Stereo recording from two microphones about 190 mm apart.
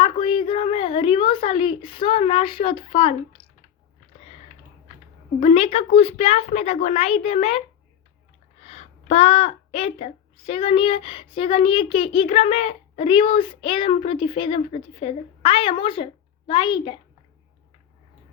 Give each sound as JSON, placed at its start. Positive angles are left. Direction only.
{"t": 0.0, "sound": "a woman's voice", "side_deg": 25}
{"t": 5.4, "sound": "a woman's voice", "side_deg": 30}
{"t": 8.6, "sound": "a woman's voice", "side_deg": 35}